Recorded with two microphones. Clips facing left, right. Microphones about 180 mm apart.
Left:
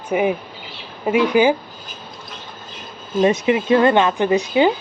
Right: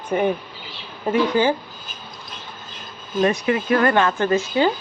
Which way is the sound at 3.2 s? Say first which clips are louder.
Left 3 dB; 20° left (ahead or behind).